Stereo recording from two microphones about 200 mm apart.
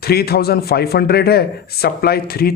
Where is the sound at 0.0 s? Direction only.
50° left (ahead or behind).